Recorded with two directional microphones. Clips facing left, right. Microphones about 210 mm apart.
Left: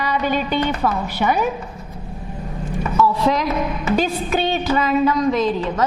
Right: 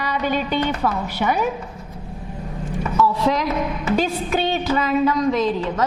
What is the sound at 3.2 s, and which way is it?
A woman's voice, 15° left (ahead or behind).